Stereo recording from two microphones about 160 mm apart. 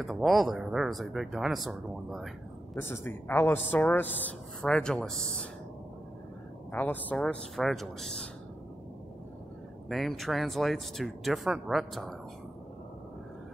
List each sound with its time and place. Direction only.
0.0 s speech: centre (ahead or behind)
2.8 s speech: 15° left (ahead or behind)
6.7 s speech: 10° left (ahead or behind)
9.8 s speech: centre (ahead or behind)